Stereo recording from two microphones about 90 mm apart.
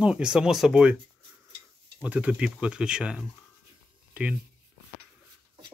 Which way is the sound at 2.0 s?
15° right (ahead or behind).